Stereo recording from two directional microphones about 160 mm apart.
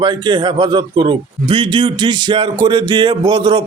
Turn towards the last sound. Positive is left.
turn(degrees=-30)  # may be behind; listen again after turning